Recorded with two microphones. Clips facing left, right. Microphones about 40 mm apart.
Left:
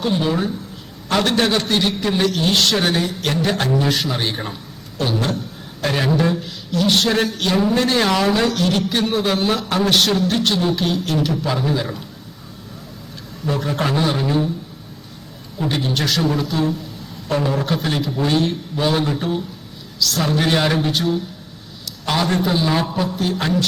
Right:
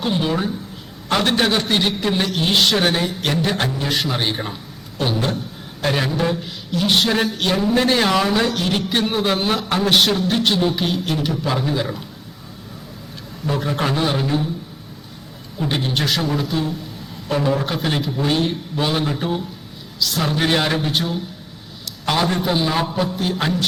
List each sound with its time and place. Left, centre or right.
0.0 s a man's voice: centre
5.8 s a man's voice: centre
8.5 s a man's voice: centre
13.5 s a man's voice: centre
15.7 s a man's voice: centre